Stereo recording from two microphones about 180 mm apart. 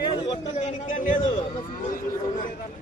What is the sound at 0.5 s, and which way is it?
Speech, 40° left (ahead or behind).